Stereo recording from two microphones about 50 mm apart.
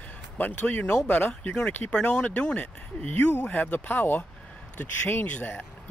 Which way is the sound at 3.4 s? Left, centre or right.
Left.